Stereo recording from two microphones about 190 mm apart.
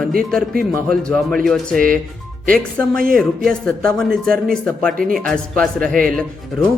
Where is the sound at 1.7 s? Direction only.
45° right (ahead or behind).